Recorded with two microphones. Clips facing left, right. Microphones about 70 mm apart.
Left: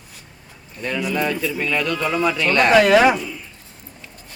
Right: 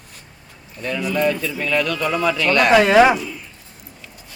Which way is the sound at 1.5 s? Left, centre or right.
Left.